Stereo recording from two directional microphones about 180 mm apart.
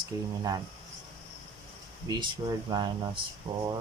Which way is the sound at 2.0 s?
25° right (ahead or behind).